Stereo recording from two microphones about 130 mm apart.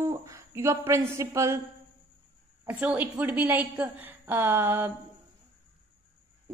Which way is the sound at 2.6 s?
10° right (ahead or behind).